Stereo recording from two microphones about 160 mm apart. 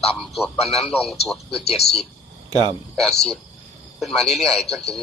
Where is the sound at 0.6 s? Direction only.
Centre (ahead or behind).